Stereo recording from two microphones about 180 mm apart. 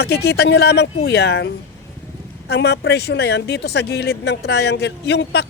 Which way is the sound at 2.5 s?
65° left (ahead or behind).